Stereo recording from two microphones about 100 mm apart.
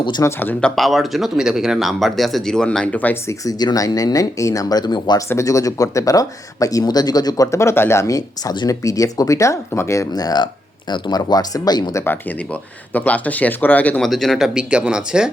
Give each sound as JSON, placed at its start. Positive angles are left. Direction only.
{"t": 0.2, "sound": "speech", "side_deg": 25}
{"t": 0.6, "sound": "speech", "side_deg": 0}
{"t": 3.2, "sound": "speech", "side_deg": 40}
{"t": 5.3, "sound": "speech", "side_deg": 30}
{"t": 7.4, "sound": "speech", "side_deg": 30}
{"t": 10.1, "sound": "speech", "side_deg": 40}
{"t": 12.9, "sound": "speech", "side_deg": 15}
{"t": 14.0, "sound": "speech", "side_deg": 5}